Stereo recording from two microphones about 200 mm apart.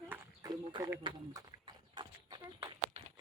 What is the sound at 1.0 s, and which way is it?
Speech, 20° right (ahead or behind).